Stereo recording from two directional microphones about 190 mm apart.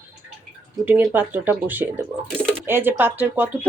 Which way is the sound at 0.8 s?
10° right (ahead or behind).